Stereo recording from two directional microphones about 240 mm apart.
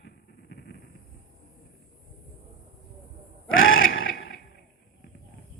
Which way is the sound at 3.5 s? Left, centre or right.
Left.